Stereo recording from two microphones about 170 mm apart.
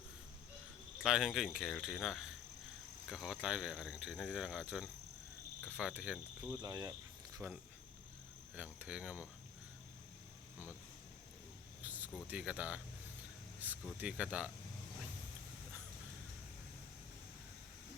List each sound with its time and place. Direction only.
1.0 s speech: 5° right (ahead or behind)
5.7 s cricket: 5° right (ahead or behind)
6.6 s speech: 20° right (ahead or behind)
8.5 s cricket: 10° right (ahead or behind)
11.8 s a sound: 10° right (ahead or behind)
12.3 s cricket: 5° right (ahead or behind)
13.6 s a sound: 10° right (ahead or behind)
14.0 s cricket: 5° right (ahead or behind)